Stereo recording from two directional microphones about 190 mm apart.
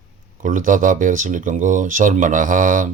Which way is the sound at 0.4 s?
45° right (ahead or behind).